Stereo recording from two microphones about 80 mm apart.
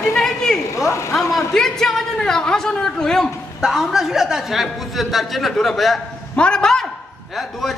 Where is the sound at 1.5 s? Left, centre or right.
Centre.